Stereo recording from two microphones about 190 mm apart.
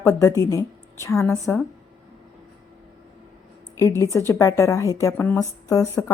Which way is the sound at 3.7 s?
15° left (ahead or behind).